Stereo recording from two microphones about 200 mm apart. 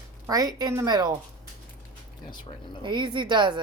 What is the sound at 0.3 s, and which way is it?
Speech, 20° right (ahead or behind).